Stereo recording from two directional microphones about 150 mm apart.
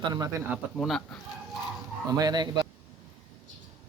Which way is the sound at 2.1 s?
25° right (ahead or behind).